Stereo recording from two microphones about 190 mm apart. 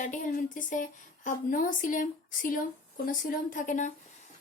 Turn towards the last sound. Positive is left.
turn(degrees=40)  # may be behind; listen again after turning